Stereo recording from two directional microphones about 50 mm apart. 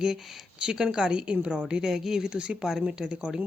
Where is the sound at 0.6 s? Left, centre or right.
Centre.